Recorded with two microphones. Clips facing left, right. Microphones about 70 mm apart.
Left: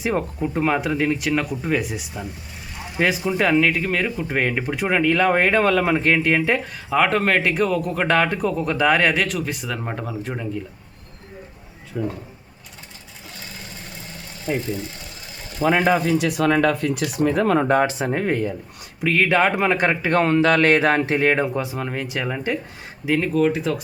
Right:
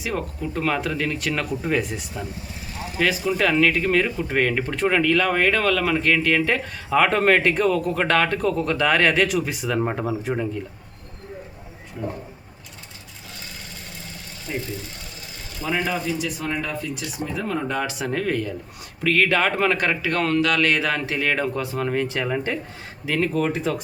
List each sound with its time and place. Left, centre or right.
0.0 s speech: left
1.3 s speech: centre
3.0 s speech: centre
5.1 s speech: left; by 9.2 s centre
9.2 s speech: centre
11.9 s speech: left
14.5 s speech: left
15.6 s speech: left
17.7 s speech: left
18.9 s speech: centre
21.4 s speech: centre
21.8 s speech: centre